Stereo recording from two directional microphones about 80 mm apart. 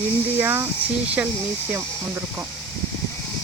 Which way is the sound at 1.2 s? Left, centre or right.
Centre.